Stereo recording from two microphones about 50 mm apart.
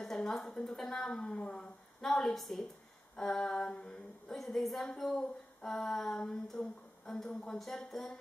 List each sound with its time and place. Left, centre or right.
0.0 s a woman's voice: centre
1.3 s speech: left
1.6 s a woman's voice: centre